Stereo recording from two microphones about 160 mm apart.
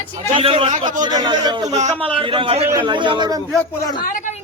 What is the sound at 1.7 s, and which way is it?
A man's voice, 40° right (ahead or behind).